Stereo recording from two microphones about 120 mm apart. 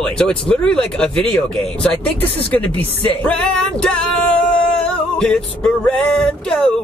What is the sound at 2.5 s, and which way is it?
Speech, 10° left (ahead or behind).